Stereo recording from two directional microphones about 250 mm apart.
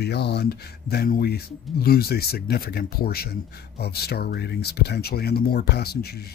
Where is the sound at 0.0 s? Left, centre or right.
Left.